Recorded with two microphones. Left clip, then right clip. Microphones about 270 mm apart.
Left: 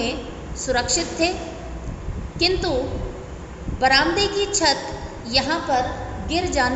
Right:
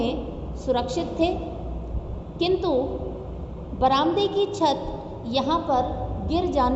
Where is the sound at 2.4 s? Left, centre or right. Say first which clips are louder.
Left 2 dB; centre.